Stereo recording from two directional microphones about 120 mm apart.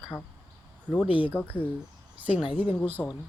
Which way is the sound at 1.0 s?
45° left (ahead or behind).